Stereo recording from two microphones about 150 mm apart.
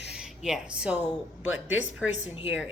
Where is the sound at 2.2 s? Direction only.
35° left (ahead or behind).